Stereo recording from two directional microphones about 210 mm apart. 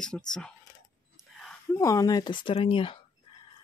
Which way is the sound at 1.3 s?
Centre (ahead or behind).